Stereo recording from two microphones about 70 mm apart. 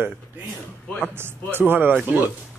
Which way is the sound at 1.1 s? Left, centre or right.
Right.